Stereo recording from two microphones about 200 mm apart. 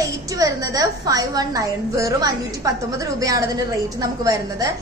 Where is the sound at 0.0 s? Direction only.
15° right (ahead or behind).